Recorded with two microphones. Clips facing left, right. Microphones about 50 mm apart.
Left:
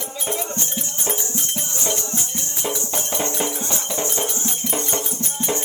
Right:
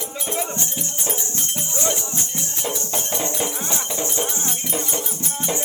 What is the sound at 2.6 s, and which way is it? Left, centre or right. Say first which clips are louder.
Music: left 1 dB; centre.